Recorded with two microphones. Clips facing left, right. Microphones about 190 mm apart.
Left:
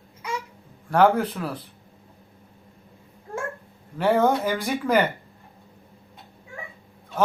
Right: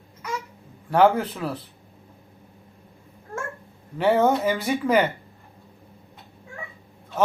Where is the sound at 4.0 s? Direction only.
5° right (ahead or behind).